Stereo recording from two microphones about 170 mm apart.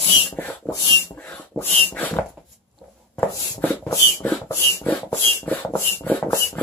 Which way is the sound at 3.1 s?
10° left (ahead or behind).